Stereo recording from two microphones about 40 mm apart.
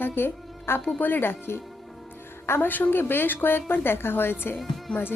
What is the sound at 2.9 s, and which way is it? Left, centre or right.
Speech, left.